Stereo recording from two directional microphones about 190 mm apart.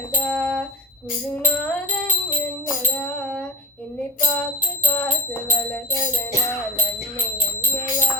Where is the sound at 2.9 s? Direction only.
5° left (ahead or behind).